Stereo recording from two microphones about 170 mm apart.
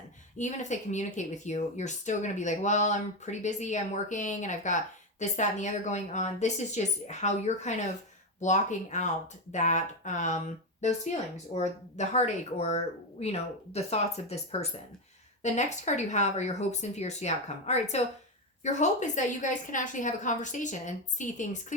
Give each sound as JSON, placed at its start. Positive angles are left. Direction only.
{"t": 0.3, "sound": "speech", "side_deg": 45}